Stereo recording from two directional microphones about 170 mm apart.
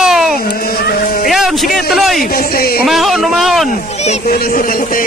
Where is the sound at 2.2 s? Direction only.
60° left (ahead or behind).